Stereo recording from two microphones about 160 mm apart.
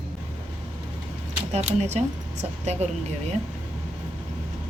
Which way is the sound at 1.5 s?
45° right (ahead or behind).